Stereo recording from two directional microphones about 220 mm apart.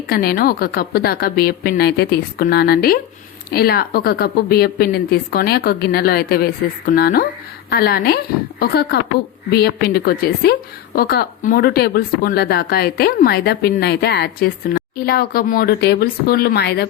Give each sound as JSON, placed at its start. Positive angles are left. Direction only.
{"t": 0.1, "sound": "a woman's voice", "side_deg": 45}